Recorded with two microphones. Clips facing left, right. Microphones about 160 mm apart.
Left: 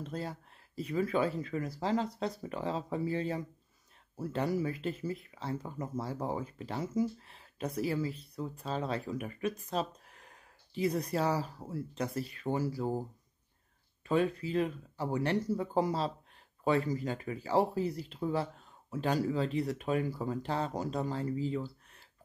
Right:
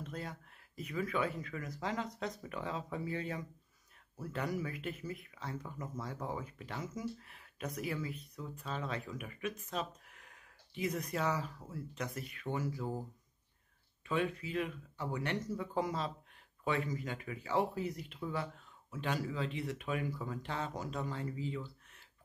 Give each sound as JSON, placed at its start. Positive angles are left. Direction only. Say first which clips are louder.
{"t": 0.0, "sound": "speech", "louder": "left 5 dB", "side_deg": 30}
{"t": 14.0, "sound": "speech", "louder": "left 6 dB", "side_deg": 35}